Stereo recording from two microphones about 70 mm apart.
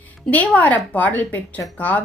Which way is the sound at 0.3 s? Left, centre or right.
Left.